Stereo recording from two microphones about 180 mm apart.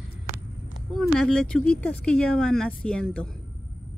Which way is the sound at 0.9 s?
Centre (ahead or behind).